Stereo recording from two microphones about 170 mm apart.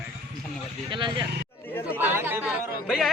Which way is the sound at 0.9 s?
30° right (ahead or behind).